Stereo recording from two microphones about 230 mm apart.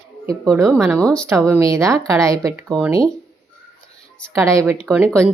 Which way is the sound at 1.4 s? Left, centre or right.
Centre.